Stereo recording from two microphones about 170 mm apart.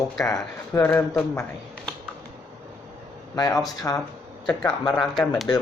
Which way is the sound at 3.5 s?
Centre (ahead or behind).